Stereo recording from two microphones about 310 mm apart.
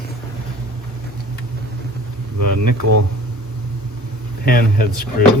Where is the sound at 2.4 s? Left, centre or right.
Right.